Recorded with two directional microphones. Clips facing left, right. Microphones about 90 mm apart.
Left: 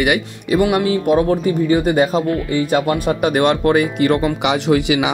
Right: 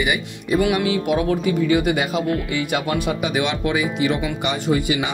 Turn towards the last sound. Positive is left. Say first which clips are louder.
# left 5 dB
turn(degrees=90)